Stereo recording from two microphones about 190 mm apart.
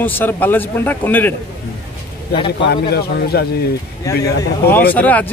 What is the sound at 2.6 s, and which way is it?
Speech, 55° left (ahead or behind).